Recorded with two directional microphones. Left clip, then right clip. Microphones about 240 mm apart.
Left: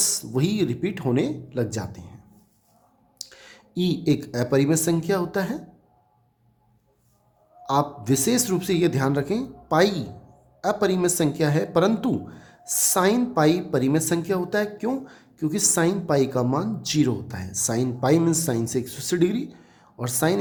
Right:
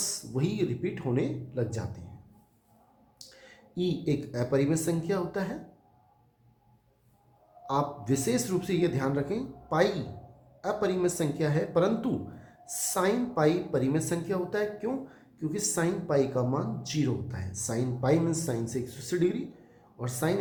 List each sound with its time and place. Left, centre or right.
0.0 s speech: left
3.2 s speech: left
7.6 s speech: left